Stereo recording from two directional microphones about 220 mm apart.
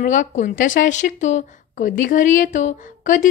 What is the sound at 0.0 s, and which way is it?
A woman's voice, 35° left (ahead or behind).